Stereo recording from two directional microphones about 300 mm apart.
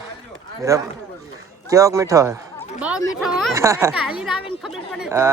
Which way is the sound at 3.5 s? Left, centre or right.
Centre.